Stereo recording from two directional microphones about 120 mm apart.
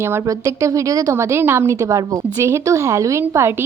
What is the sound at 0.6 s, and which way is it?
A woman's voice, 25° right (ahead or behind).